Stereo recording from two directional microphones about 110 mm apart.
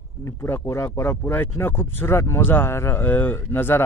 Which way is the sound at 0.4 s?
25° left (ahead or behind).